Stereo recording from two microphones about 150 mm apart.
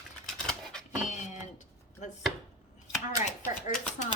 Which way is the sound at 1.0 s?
50° left (ahead or behind).